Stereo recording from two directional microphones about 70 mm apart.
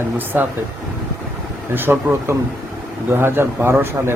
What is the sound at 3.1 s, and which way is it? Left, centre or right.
A man's voice, right.